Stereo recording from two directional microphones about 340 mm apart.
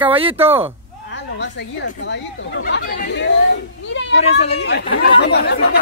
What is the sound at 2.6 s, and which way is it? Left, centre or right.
Speech, left.